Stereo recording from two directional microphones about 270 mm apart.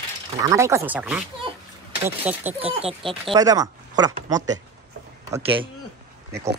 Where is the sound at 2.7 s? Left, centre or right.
Right.